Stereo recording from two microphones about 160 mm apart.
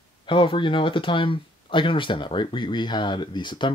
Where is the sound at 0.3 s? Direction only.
30° left (ahead or behind).